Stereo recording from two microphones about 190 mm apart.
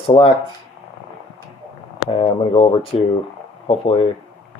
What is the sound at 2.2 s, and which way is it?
Speech, 30° left (ahead or behind).